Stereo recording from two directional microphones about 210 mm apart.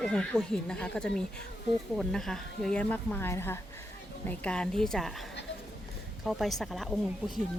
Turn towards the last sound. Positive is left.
turn(degrees=0)  # may be behind; listen again after turning